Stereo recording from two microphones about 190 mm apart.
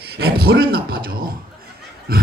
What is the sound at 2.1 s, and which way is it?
Pig, 55° right (ahead or behind).